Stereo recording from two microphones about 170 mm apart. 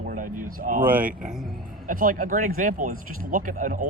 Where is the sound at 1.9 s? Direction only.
55° right (ahead or behind).